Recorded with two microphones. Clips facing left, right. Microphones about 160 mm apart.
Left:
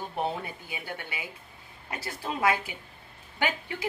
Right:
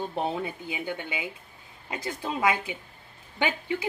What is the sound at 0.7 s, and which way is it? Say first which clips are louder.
Speech: right 5 dB; 20° right (ahead or behind).